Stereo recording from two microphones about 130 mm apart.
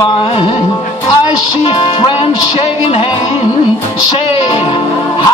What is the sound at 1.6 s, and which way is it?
Music, 40° left (ahead or behind).